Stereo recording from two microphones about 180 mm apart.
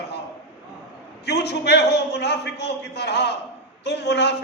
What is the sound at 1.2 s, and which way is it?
A man's voice, 65° left (ahead or behind).